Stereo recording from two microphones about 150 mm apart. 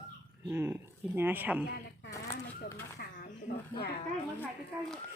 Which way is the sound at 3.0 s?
75° left (ahead or behind).